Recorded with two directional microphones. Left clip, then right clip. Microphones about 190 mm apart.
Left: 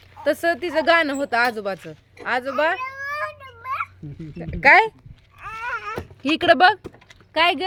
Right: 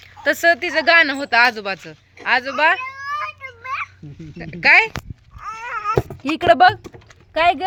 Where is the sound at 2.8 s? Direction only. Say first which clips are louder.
Right 2 dB; 35° left (ahead or behind).